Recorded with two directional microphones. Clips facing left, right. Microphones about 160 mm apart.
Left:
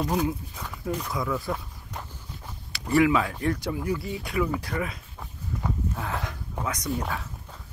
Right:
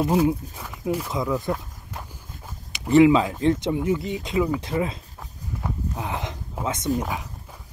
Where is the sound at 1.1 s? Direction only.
20° right (ahead or behind).